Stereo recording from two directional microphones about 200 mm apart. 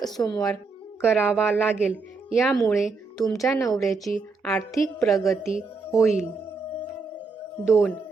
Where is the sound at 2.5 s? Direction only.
15° left (ahead or behind).